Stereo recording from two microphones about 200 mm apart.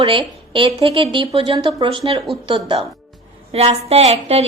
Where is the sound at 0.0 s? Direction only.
25° right (ahead or behind).